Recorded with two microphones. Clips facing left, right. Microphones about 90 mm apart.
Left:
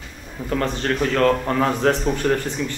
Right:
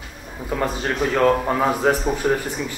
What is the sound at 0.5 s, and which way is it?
A man's voice, 5° right (ahead or behind).